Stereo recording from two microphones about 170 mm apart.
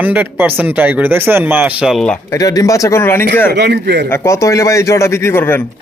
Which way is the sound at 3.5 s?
80° right.